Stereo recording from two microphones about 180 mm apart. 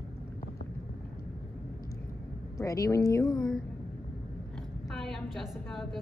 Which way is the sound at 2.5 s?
15° left (ahead or behind).